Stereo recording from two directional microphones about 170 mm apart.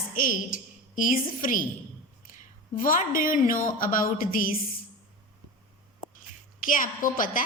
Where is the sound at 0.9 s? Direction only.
50° left (ahead or behind).